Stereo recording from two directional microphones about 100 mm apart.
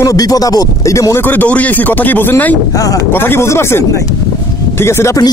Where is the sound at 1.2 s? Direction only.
15° left (ahead or behind).